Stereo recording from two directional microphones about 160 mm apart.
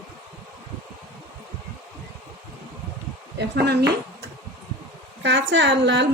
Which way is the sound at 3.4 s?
90° right.